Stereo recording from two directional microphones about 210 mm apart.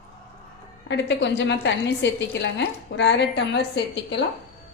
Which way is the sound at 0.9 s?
55° left (ahead or behind).